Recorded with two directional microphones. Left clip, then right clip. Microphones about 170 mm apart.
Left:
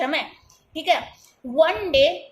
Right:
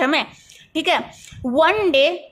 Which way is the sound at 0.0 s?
40° right (ahead or behind).